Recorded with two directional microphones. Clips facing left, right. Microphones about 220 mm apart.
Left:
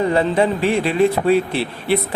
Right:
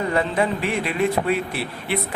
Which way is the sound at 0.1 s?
30° left (ahead or behind).